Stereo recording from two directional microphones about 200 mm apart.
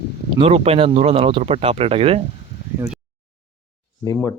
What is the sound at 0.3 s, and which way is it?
Speech, 30° right (ahead or behind).